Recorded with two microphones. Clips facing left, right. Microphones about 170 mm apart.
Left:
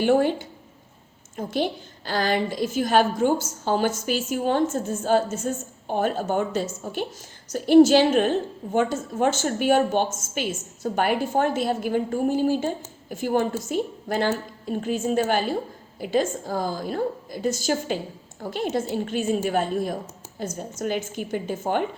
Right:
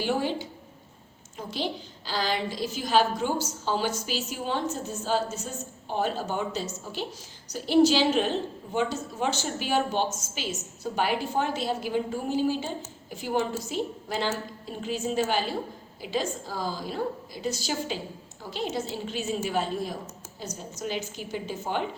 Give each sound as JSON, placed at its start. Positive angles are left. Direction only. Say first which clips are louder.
{"t": 0.0, "sound": "a woman's voice", "louder": "left 8 dB", "side_deg": 55}